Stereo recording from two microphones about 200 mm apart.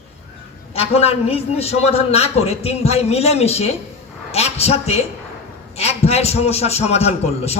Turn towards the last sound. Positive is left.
turn(degrees=30)  # may be behind; listen again after turning